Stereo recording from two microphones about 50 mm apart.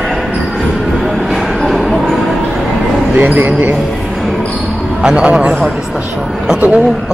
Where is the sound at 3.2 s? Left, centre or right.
Right.